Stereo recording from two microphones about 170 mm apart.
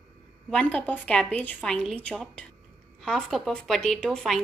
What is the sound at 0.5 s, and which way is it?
A woman's voice, 10° left (ahead or behind).